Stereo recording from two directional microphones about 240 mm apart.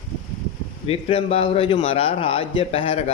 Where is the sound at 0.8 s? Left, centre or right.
Left.